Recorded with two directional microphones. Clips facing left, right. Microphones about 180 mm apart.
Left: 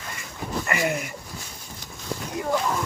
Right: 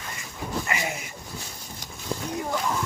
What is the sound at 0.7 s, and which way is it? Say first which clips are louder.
Speech: left 5 dB; 55° left (ahead or behind).